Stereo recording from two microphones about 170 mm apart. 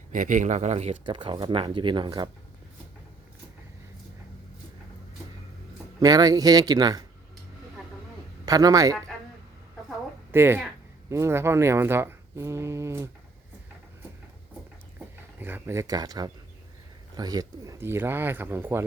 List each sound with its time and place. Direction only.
0.1 s speech: 50° right (ahead or behind); by 2.3 s 30° right (ahead or behind)
6.0 s speech: 20° right (ahead or behind)
8.4 s speech: 20° right (ahead or behind)
10.3 s speech: 15° right (ahead or behind)
15.4 s speech: 10° right (ahead or behind)